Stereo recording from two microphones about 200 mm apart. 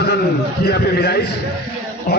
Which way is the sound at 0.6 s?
55° left (ahead or behind).